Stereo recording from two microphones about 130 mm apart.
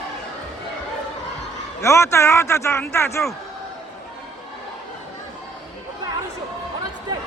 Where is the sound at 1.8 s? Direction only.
20° left (ahead or behind).